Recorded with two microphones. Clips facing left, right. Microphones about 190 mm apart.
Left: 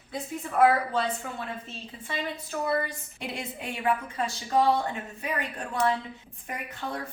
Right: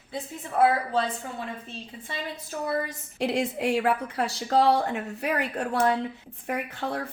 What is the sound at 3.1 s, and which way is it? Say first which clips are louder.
Speech: right 11 dB; 75° right (ahead or behind).